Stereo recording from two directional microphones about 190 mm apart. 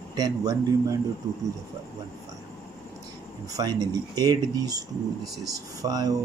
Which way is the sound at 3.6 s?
20° right (ahead or behind).